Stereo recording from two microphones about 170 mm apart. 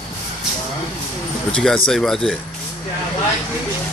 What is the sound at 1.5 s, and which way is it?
Speech, 5° left (ahead or behind).